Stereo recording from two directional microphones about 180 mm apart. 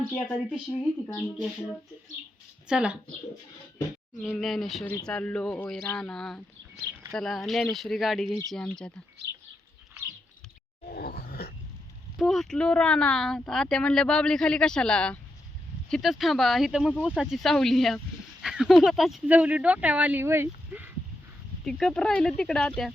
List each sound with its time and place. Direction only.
0.1 s speech: centre (ahead or behind)
0.8 s speech: 15° left (ahead or behind)
2.6 s speech: 5° right (ahead or behind)
4.2 s speech: centre (ahead or behind)
10.8 s groan: 55° left (ahead or behind)
12.1 s speech: centre (ahead or behind)
21.6 s speech: 5° left (ahead or behind)